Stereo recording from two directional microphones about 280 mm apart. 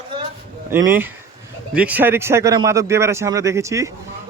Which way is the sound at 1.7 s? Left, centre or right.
Centre.